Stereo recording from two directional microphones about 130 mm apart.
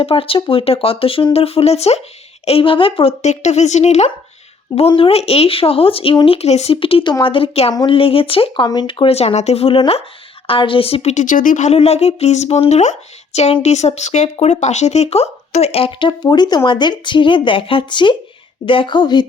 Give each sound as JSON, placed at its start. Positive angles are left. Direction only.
{"t": 0.0, "sound": "speech", "side_deg": 45}
{"t": 4.9, "sound": "speech", "side_deg": 45}
{"t": 7.7, "sound": "a woman's voice", "side_deg": 30}
{"t": 7.9, "sound": "speech", "side_deg": 45}
{"t": 11.1, "sound": "a woman's voice", "side_deg": 75}